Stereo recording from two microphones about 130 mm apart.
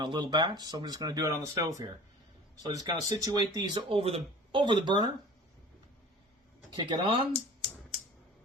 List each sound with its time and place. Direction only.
0.0 s speech: 35° right (ahead or behind)
2.6 s speech: 30° right (ahead or behind)
3.8 s speech: 50° right (ahead or behind)
6.7 s speech: 35° right (ahead or behind)